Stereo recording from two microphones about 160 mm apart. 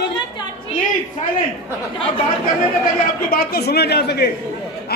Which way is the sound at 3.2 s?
70° left (ahead or behind).